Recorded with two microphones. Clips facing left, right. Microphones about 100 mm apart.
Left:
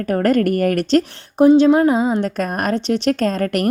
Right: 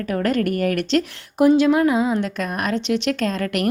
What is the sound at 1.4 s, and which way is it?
Speech, 30° left (ahead or behind).